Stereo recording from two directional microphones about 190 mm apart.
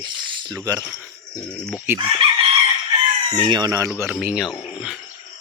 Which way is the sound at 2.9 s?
25° right (ahead or behind).